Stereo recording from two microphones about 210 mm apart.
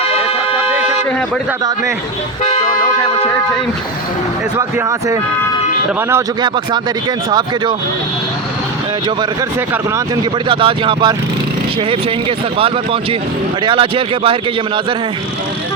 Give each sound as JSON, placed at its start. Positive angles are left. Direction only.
{"t": 4.5, "sound": "speech", "side_deg": -15}
{"t": 10.5, "sound": "speech", "side_deg": -25}
{"t": 12.5, "sound": "speech", "side_deg": -25}